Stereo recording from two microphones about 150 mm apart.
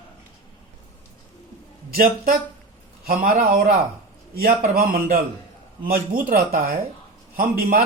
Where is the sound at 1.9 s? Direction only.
75° right (ahead or behind).